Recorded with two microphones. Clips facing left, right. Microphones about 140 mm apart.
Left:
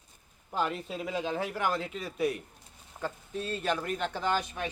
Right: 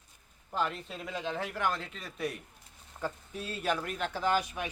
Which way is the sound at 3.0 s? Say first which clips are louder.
Left 2 dB; 10° right (ahead or behind).